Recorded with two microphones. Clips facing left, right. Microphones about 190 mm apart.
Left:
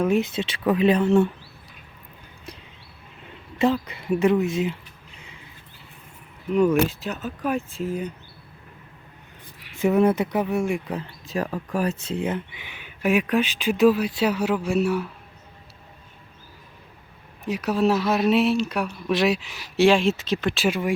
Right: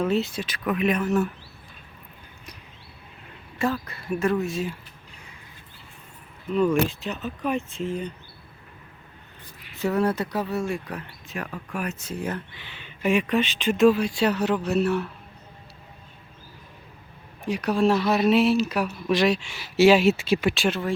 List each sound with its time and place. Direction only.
0.0 s speech: 10° left (ahead or behind)
0.3 s speech: 25° left (ahead or behind)
3.6 s speech: 20° left (ahead or behind)
6.5 s speech: 10° left (ahead or behind)
9.8 s speech: 20° left (ahead or behind)
11.3 s speech: 35° left (ahead or behind)
12.5 s speech: 15° left (ahead or behind)
17.4 s speech: 5° left (ahead or behind)
20.7 s speech: 10° left (ahead or behind)